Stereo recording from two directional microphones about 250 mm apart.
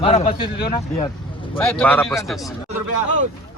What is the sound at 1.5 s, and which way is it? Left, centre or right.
Speech, centre.